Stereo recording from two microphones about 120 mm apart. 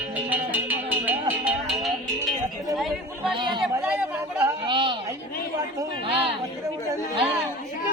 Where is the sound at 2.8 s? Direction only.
Centre (ahead or behind).